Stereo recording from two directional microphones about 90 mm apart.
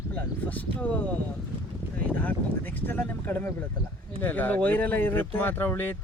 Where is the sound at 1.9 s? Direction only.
20° left (ahead or behind).